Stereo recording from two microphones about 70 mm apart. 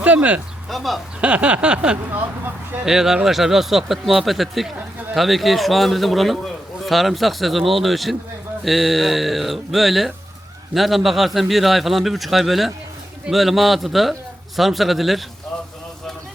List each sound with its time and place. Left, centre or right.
0.0 s speech: right
0.7 s a man's voice: centre
1.2 s a sound: centre
2.1 s speech: right
2.8 s a sound: centre
3.2 s a man's voice: centre